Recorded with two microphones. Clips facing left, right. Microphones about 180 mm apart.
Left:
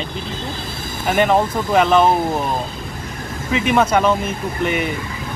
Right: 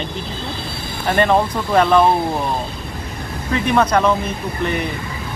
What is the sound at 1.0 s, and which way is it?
Speech, 5° left (ahead or behind).